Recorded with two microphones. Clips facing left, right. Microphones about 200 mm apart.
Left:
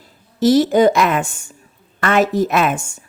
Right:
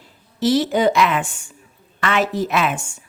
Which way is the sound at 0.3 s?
45° left (ahead or behind).